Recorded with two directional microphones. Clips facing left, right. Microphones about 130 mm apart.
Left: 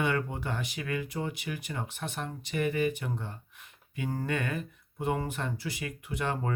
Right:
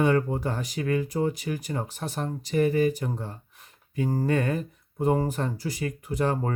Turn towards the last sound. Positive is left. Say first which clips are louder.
# right 6 dB
turn(degrees=-35)  # may be behind; listen again after turning